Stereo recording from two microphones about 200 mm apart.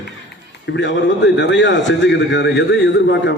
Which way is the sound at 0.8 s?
60° left (ahead or behind).